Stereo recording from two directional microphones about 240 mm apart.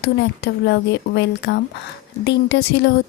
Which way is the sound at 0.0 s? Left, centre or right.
Left.